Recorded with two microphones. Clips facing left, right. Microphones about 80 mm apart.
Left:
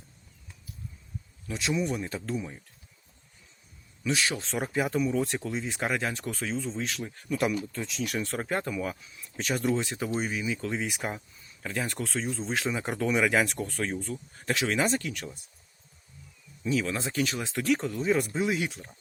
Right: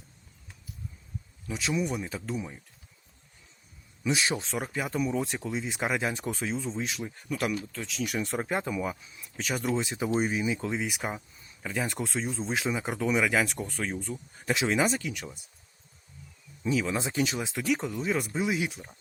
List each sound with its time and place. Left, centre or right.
1.5 s speech: centre
4.0 s speech: centre
4.4 s speech: centre
10.1 s speech: right
10.8 s speech: centre
16.6 s speech: centre
17.5 s speech: centre